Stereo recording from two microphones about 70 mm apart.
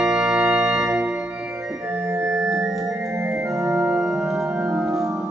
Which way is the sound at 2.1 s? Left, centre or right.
Right.